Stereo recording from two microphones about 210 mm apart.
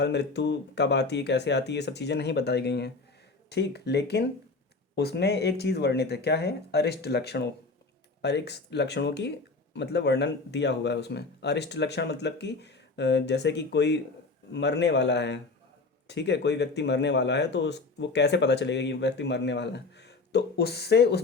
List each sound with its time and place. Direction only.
0.0 s speech: 55° left (ahead or behind)